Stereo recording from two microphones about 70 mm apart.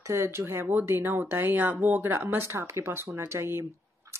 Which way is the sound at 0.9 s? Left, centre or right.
Right.